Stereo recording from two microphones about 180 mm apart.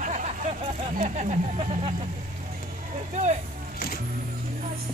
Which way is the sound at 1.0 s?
40° right (ahead or behind).